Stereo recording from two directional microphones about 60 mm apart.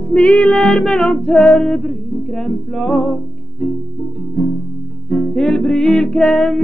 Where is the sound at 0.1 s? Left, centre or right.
Left.